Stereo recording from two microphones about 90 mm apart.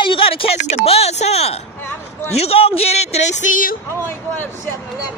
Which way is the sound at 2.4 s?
90° left.